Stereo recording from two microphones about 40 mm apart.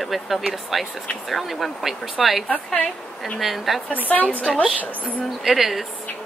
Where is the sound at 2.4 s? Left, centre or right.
Left.